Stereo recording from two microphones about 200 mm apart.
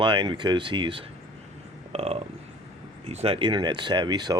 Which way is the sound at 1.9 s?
30° right (ahead or behind).